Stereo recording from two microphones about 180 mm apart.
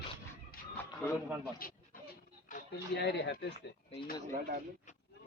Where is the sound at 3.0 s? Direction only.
70° left (ahead or behind).